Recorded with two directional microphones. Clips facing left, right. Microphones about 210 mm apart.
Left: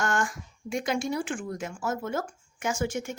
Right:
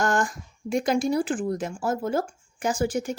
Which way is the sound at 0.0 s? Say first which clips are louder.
Right 4 dB; 35° right (ahead or behind).